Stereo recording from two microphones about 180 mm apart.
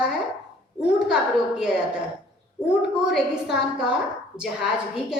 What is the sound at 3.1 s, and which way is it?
Speech, 5° right (ahead or behind).